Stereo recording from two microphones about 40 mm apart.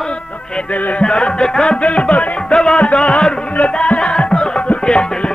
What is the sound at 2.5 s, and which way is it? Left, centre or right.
Music, centre.